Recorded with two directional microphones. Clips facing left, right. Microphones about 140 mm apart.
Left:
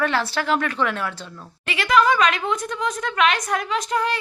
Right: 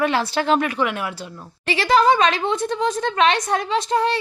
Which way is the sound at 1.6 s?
35° right (ahead or behind).